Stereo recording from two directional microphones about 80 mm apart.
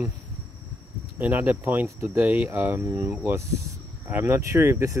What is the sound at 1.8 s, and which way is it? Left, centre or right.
Speech, right.